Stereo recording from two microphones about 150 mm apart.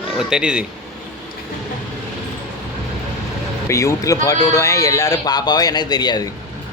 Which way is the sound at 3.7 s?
20° left (ahead or behind).